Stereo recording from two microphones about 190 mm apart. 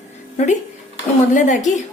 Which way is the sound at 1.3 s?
40° left (ahead or behind).